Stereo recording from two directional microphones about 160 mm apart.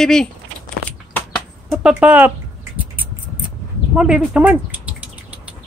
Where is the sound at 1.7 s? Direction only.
5° right (ahead or behind).